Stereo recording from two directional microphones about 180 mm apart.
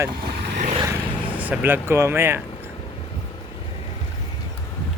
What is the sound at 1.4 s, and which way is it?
Speech, 10° right (ahead or behind).